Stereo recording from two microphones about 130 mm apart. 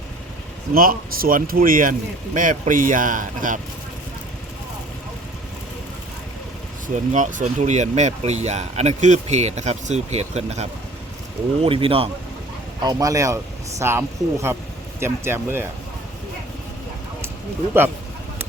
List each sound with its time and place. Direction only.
0.8 s speech: 90° right
6.8 s speech: 80° right; by 10.7 s 55° right (ahead or behind)
11.6 s speech: 45° right (ahead or behind)
12.8 s a man's voice: 30° right (ahead or behind)